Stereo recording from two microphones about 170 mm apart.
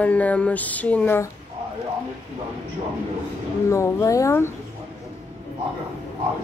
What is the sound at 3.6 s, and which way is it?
Speech, 15° left (ahead or behind).